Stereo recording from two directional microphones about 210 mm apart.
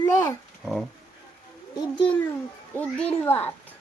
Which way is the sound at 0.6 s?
Centre (ahead or behind).